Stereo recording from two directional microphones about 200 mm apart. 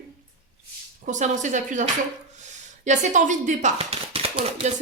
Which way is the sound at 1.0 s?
35° right (ahead or behind).